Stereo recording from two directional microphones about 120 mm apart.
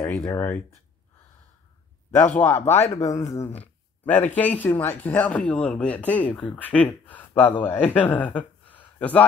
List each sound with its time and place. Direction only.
0.0 s speech: 25° left (ahead or behind)
2.0 s speech: 15° left (ahead or behind)